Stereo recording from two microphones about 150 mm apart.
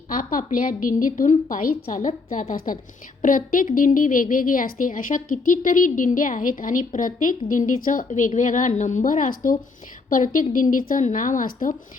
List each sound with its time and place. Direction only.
0.1 s a woman's voice: 65° left (ahead or behind)